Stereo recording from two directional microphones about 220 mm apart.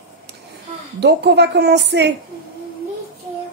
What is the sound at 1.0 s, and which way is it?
A woman's voice, 50° right (ahead or behind).